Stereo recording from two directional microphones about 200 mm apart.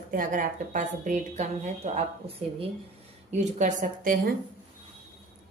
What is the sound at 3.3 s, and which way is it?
A woman's voice, 35° right (ahead or behind).